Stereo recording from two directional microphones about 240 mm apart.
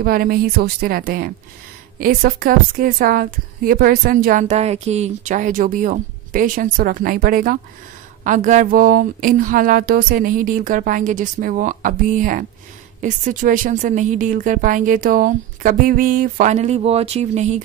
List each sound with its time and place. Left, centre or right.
0.0 s a woman's voice: right